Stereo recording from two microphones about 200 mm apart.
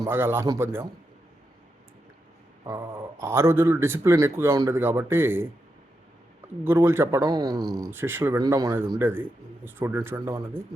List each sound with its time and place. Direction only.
0.0 s speech: 10° right (ahead or behind)
2.6 s speech: 10° right (ahead or behind)
6.7 s speech: 10° right (ahead or behind)